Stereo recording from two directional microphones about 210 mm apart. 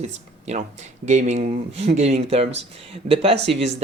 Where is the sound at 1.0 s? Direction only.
35° right (ahead or behind).